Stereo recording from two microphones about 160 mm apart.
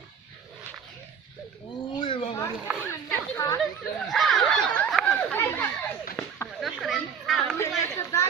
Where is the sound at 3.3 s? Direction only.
20° left (ahead or behind).